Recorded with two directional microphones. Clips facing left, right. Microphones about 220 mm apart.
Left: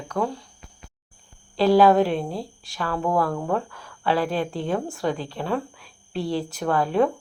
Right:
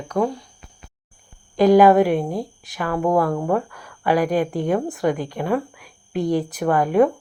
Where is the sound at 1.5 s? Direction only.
15° right (ahead or behind).